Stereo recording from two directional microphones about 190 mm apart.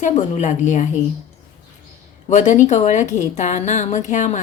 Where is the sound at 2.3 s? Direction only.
40° left (ahead or behind).